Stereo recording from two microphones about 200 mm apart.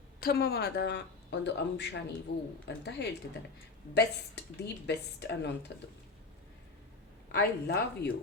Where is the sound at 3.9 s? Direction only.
55° left (ahead or behind).